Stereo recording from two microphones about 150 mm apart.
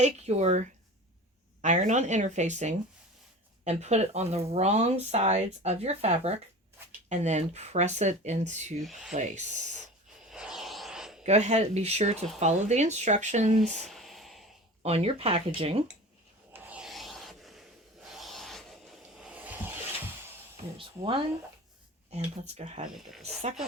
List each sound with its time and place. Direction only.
0.0 s speech: 45° right (ahead or behind)
8.8 s rub: centre (ahead or behind)
9.1 s speech: 50° right (ahead or behind)
10.2 s a sound: 5° right (ahead or behind)
11.2 s speech: 50° right (ahead or behind)
13.8 s a sound: centre (ahead or behind)
14.8 s speech: 40° right (ahead or behind)
16.5 s rub: 10° right (ahead or behind)
20.7 s speech: 35° right (ahead or behind)
22.1 s speech: 45° right (ahead or behind)